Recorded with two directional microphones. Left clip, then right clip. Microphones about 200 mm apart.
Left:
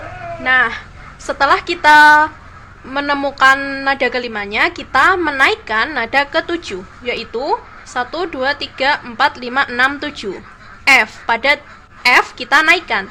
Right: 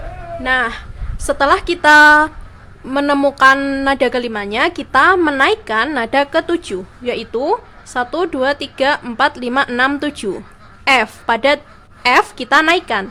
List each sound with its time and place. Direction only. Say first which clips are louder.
0.4 s a woman's voice: left 3 dB; 50° right (ahead or behind)